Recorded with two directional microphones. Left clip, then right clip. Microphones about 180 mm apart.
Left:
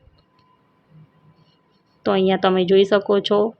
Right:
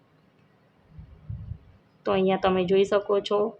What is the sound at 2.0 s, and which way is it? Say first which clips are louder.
A woman's voice: left 5 dB; 25° left (ahead or behind).